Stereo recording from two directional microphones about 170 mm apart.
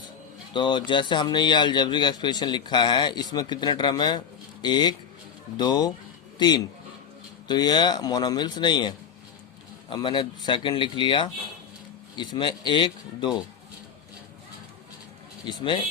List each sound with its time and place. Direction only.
0.5 s speech: 30° left (ahead or behind)
15.4 s speech: 25° left (ahead or behind)